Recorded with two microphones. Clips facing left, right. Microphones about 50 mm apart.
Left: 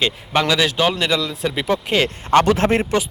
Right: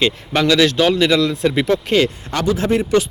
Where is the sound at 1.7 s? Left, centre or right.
Centre.